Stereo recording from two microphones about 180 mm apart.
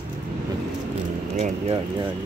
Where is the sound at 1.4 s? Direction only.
35° right (ahead or behind).